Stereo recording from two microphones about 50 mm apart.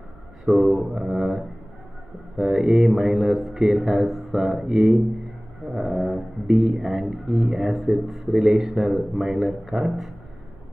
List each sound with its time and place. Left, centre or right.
0.5 s speech: right
0.9 s speech: centre
8.3 s speech: centre